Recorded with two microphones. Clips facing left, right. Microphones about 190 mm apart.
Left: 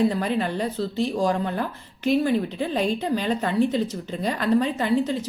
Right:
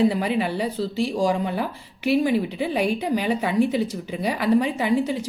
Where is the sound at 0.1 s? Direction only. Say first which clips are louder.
Right 1 dB; 10° right (ahead or behind).